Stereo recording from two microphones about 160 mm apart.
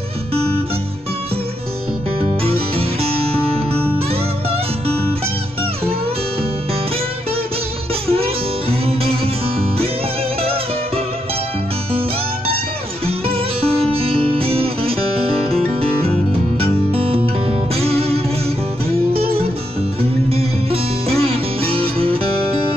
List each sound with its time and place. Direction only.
2.1 s music: 35° right (ahead or behind)
8.1 s music: 40° right (ahead or behind)
13.0 s music: 35° right (ahead or behind)
16.5 s music: 35° right (ahead or behind)
20.0 s music: 35° right (ahead or behind)